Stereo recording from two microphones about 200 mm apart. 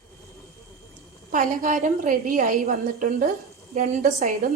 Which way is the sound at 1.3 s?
40° right (ahead or behind).